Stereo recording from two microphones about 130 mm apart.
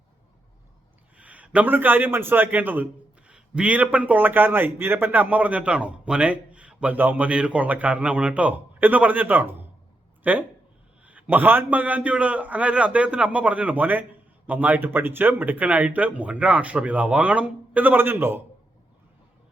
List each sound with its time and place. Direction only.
1.1 s a man's voice: 10° right (ahead or behind)